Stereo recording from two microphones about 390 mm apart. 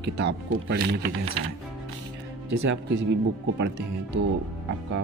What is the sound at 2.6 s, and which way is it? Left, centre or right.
Speech, right.